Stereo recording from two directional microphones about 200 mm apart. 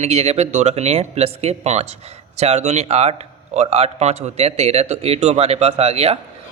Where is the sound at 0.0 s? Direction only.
30° right (ahead or behind).